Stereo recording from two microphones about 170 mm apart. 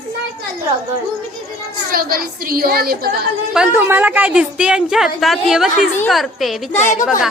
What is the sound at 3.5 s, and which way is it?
A woman's voice, 10° right (ahead or behind).